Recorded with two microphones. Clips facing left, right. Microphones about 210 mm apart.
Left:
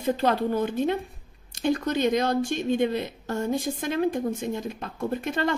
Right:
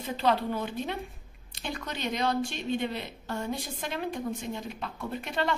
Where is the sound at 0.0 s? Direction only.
45° left (ahead or behind).